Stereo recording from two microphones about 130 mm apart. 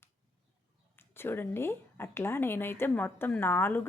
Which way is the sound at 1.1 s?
15° left (ahead or behind).